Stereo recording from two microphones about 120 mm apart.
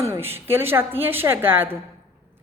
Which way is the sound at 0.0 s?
20° right (ahead or behind).